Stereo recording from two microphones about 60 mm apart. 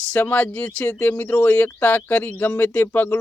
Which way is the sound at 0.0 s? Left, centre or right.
Left.